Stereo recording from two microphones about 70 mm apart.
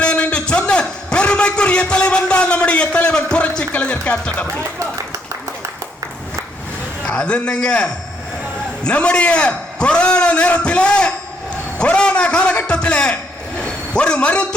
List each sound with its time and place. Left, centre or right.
0.0 s a man's voice: centre
7.0 s a man's voice: centre
13.6 s a sound: centre